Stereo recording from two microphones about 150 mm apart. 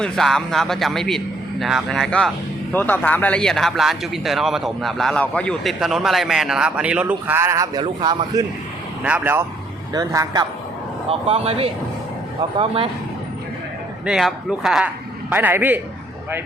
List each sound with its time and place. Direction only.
0.0 s speech: 5° left (ahead or behind); by 8.4 s 25° right (ahead or behind)
9.0 s a man's voice: 10° right (ahead or behind)
9.9 s a man's voice: 25° right (ahead or behind)
11.1 s speech: 40° right (ahead or behind)
14.0 s speech: 5° right (ahead or behind)
15.3 s a man's voice: 15° right (ahead or behind)